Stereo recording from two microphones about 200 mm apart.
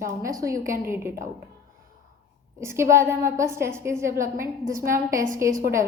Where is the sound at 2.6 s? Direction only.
15° right (ahead or behind).